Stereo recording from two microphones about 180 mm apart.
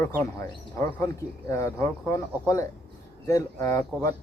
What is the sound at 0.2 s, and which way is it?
Speech, 15° left (ahead or behind).